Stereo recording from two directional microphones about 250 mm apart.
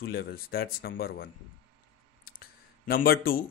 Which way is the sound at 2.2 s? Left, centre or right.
Left.